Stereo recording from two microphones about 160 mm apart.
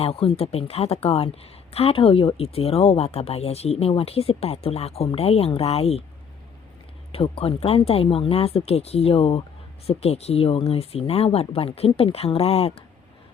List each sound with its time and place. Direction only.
0.0 s speech: 40° left (ahead or behind)
7.1 s speech: 35° left (ahead or behind)